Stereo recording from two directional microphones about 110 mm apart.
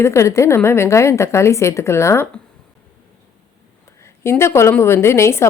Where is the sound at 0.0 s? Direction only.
25° left (ahead or behind).